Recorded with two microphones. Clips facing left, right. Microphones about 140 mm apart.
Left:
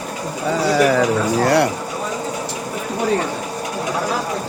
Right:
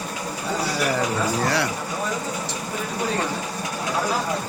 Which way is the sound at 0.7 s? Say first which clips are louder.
Left 10 dB; 90° left.